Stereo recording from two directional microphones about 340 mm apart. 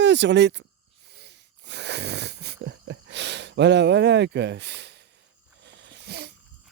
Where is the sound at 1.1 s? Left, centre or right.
Right.